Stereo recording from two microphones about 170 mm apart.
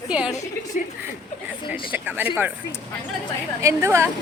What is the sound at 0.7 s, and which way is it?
Speech, 50° left (ahead or behind).